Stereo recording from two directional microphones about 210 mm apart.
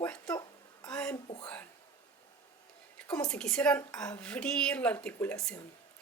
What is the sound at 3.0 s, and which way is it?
A woman's voice, 5° left (ahead or behind).